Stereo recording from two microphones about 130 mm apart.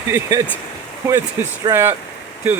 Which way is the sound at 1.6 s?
20° right (ahead or behind).